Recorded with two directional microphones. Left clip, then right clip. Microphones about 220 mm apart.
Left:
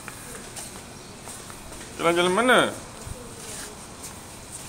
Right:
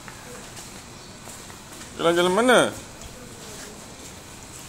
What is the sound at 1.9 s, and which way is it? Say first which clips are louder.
Speech: right 1 dB; 25° right (ahead or behind).